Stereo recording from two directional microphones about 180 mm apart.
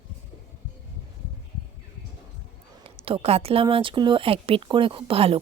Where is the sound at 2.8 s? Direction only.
30° right (ahead or behind).